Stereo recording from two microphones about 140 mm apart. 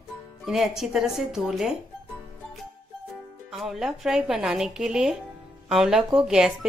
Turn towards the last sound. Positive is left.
turn(degrees=-5)  # may be behind; listen again after turning